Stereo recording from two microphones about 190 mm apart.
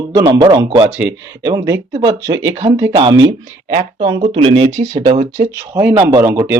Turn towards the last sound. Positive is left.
turn(degrees=-15)  # may be behind; listen again after turning